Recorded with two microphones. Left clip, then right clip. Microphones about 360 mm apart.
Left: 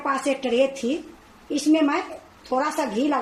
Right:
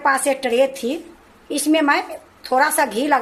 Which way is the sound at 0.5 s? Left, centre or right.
Right.